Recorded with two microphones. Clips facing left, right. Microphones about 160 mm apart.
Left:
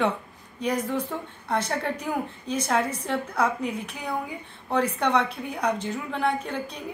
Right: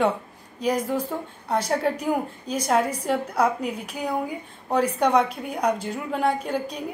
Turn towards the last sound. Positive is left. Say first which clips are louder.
# right 4 dB
turn(degrees=-10)  # may be behind; listen again after turning